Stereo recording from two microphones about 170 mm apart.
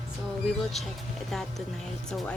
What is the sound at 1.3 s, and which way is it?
Speech, centre (ahead or behind).